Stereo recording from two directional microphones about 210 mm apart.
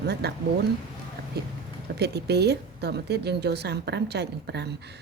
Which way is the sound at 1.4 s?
50° right (ahead or behind).